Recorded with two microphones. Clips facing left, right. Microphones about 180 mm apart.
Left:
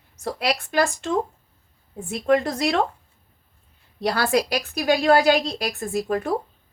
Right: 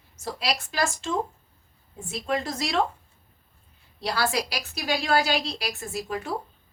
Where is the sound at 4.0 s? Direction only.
55° left (ahead or behind).